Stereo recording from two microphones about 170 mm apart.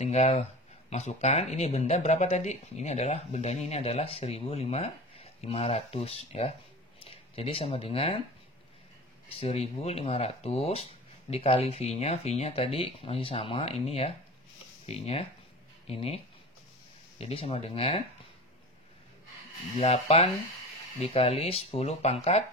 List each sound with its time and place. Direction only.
0.0 s speech: 40° left (ahead or behind)
9.3 s speech: 35° left (ahead or behind)
17.2 s speech: 35° left (ahead or behind)
19.8 s speech: 35° left (ahead or behind)